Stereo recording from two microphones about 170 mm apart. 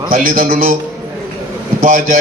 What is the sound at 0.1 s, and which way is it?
Speech, 50° right (ahead or behind).